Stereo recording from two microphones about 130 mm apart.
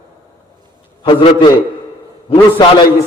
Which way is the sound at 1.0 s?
40° left (ahead or behind).